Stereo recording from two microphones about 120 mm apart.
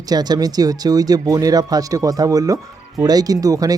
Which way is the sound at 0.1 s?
35° right (ahead or behind).